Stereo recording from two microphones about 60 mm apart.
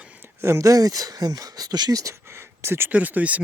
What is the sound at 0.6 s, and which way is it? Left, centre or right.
Speech, right.